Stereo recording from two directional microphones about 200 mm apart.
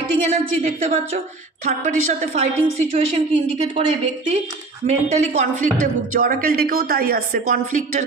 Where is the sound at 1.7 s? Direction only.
40° right (ahead or behind).